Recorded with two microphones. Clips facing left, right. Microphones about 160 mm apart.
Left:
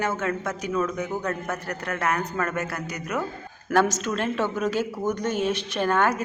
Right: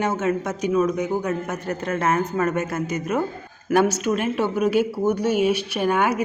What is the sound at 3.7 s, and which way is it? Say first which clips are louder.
A woman's voice: right 3 dB; 10° right (ahead or behind).